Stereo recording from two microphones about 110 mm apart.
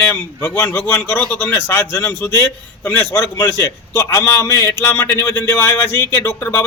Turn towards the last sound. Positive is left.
turn(degrees=20)  # may be behind; listen again after turning